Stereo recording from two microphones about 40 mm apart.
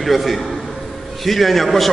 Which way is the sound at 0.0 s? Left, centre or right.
Centre.